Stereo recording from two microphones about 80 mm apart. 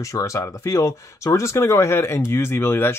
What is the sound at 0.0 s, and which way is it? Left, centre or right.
Speech, left.